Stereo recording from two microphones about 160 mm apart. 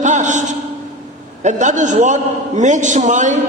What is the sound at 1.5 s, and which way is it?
A man's voice, 50° right (ahead or behind).